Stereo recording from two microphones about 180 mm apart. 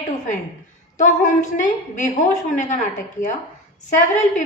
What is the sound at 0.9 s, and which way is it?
A woman's voice, 45° left (ahead or behind).